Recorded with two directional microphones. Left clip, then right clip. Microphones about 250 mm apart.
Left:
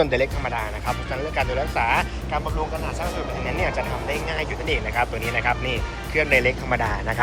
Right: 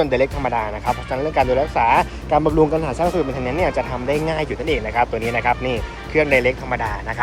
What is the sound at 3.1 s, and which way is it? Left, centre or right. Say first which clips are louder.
Speech: right 6 dB; centre.